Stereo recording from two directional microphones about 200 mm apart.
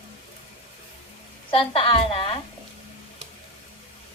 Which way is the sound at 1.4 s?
25° left (ahead or behind).